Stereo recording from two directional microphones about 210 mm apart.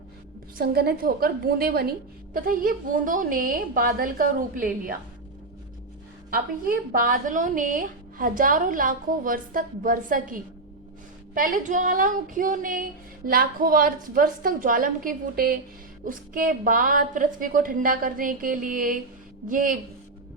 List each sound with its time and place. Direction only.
0.6 s a woman's voice: 50° right (ahead or behind)
6.3 s a woman's voice: 45° right (ahead or behind)